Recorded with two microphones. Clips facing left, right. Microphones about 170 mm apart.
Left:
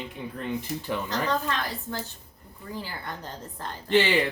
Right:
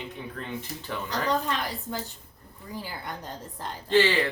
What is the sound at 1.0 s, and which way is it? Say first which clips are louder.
Speech: right 3 dB; 15° right (ahead or behind).